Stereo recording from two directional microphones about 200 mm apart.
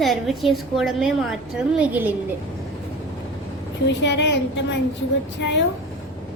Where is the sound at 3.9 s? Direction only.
60° left (ahead or behind).